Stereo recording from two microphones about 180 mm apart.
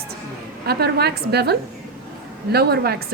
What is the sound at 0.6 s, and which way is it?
Speech, 65° right (ahead or behind).